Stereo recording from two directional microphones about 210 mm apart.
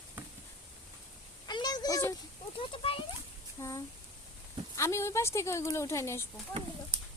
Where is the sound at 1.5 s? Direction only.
20° left (ahead or behind).